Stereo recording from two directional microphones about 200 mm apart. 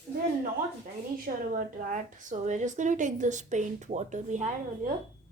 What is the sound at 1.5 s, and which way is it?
A woman's voice, 40° right (ahead or behind).